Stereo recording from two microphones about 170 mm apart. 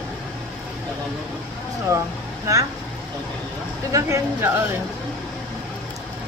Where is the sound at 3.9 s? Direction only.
20° right (ahead or behind).